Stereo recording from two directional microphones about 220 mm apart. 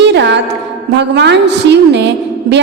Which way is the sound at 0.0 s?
50° right (ahead or behind).